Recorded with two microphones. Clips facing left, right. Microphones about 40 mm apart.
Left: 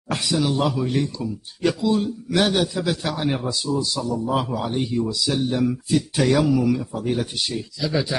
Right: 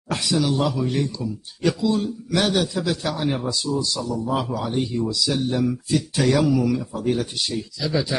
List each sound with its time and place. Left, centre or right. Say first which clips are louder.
0.1 s speech: even; centre